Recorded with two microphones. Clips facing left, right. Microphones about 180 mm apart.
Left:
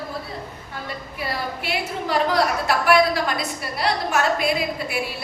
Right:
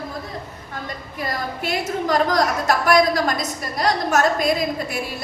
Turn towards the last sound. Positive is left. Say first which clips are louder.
# right 1 dB
turn(degrees=-40)  # may be behind; listen again after turning